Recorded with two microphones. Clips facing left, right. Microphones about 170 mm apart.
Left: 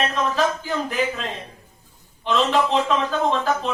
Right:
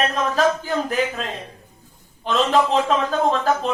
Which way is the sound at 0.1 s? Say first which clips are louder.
Right 2 dB; 40° right (ahead or behind).